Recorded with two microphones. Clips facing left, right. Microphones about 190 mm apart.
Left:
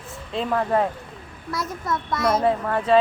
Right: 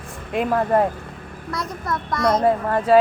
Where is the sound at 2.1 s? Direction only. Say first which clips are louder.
Right 2 dB; 5° left (ahead or behind).